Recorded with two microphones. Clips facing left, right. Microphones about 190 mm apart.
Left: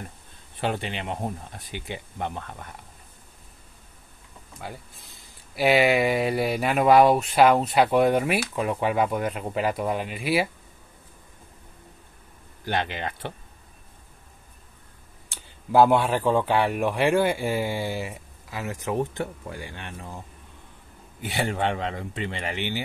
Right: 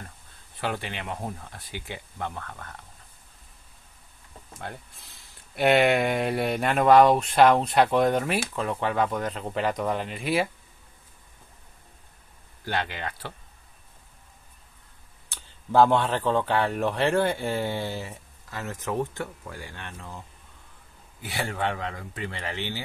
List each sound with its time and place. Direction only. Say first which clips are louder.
0.6 s speech: left 3 dB; 20° left (ahead or behind)
4.6 s speech: left 1 dB; centre (ahead or behind)
12.6 s speech: left 2 dB; 20° left (ahead or behind)
15.2 s speech: left 1 dB; 10° left (ahead or behind)